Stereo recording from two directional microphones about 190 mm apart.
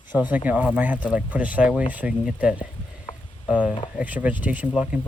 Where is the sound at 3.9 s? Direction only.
10° right (ahead or behind).